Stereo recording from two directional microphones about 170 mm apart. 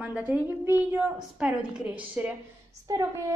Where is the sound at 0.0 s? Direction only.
10° right (ahead or behind).